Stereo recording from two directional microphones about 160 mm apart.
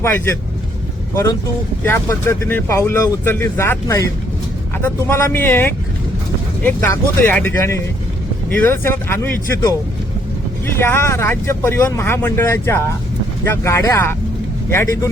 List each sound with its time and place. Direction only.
0.0 s speech: 15° left (ahead or behind)
10.8 s speech: 15° left (ahead or behind)